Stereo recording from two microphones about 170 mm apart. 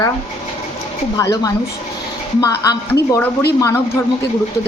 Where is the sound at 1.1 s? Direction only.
20° left (ahead or behind).